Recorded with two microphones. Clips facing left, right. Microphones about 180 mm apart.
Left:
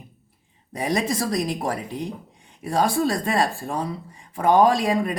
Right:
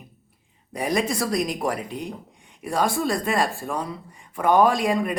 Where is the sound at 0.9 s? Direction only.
30° left (ahead or behind).